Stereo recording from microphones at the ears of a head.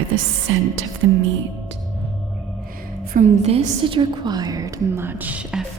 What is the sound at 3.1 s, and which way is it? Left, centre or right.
Speech, right.